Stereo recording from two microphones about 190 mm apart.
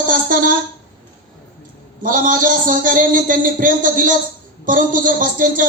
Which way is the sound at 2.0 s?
45° right (ahead or behind).